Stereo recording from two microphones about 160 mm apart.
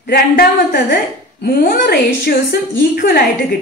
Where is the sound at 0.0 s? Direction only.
75° left (ahead or behind).